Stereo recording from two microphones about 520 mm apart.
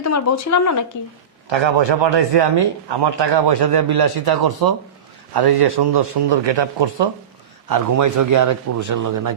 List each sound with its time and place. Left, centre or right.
0.0 s speech: left
1.5 s a man's voice: right
7.7 s a man's voice: right